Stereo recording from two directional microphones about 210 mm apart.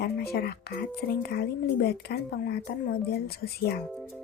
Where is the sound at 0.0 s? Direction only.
50° left (ahead or behind).